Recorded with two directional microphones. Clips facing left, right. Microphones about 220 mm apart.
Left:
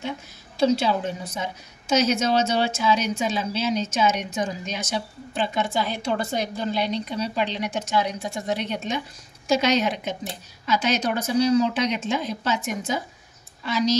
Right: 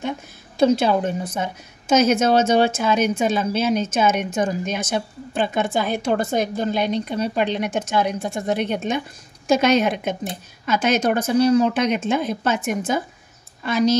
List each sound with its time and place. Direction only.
0.6 s a woman's voice: 55° right (ahead or behind)